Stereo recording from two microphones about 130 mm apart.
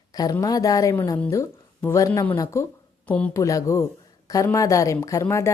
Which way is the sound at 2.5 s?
20° left (ahead or behind).